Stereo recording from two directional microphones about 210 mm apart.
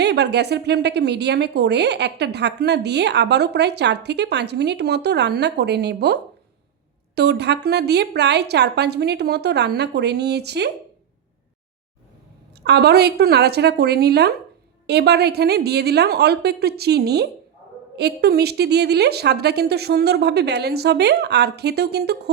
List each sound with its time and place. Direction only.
0.0 s speech: 55° right (ahead or behind)
7.2 s speech: 50° right (ahead or behind)
12.6 s speech: 50° right (ahead or behind)